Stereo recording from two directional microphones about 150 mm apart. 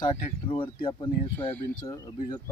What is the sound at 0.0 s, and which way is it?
Speech, 30° left (ahead or behind).